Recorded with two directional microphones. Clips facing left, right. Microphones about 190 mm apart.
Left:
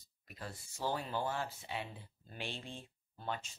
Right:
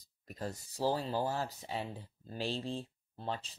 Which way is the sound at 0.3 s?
40° right (ahead or behind).